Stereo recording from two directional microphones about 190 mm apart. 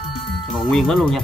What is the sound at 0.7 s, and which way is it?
Speech, centre (ahead or behind).